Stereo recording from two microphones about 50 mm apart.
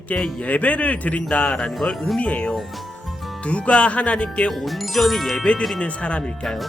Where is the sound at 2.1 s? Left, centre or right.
Left.